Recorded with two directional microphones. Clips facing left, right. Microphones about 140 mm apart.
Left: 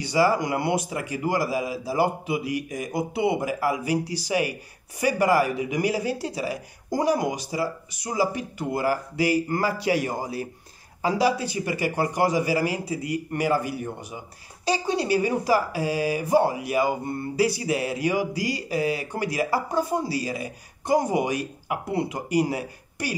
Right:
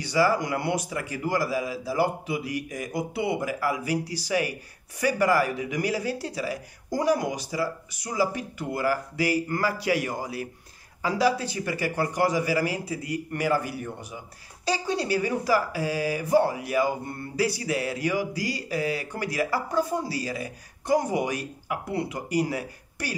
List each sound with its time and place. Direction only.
0.0 s speech: 20° left (ahead or behind)